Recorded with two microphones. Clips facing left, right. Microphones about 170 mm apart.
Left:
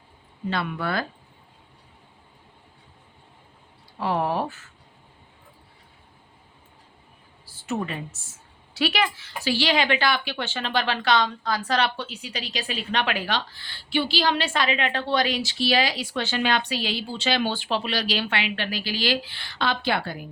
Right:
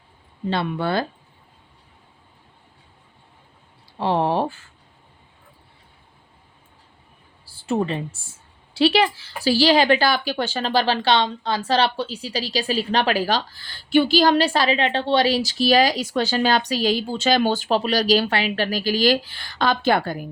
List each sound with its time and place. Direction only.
0.5 s speech: 30° right (ahead or behind)
3.9 s speech: 30° right (ahead or behind)
7.4 s a woman's voice: 30° right (ahead or behind); by 20.2 s 45° right (ahead or behind)